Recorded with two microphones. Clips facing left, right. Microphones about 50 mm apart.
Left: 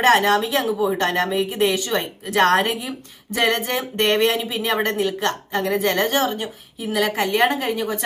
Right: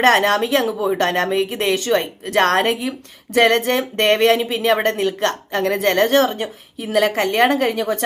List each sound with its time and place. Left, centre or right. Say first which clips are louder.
0.0 s speech: right 1 dB; right